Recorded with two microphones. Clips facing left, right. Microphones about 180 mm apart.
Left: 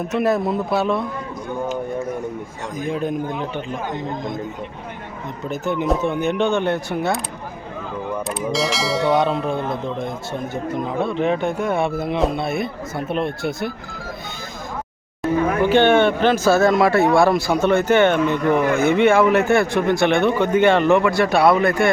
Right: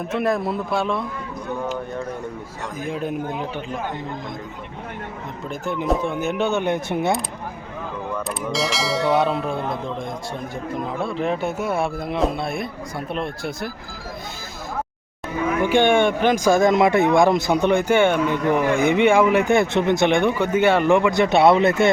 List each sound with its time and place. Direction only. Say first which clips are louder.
0.1 s speech: left 2 dB; centre (ahead or behind)
2.7 s speech: left 3 dB; 5° right (ahead or behind)
5.5 s speech: left 2 dB; centre (ahead or behind); by 7.2 s 20° right (ahead or behind)
8.3 s speech: left 3 dB; centre (ahead or behind)
15.6 s speech: left 2 dB; 10° right (ahead or behind)